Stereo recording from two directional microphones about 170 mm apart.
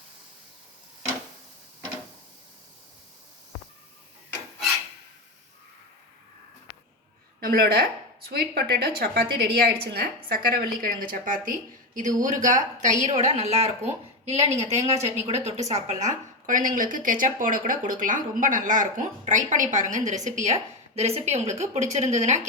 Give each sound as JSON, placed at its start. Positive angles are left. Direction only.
{"t": 7.3, "sound": "a woman's voice", "side_deg": -60}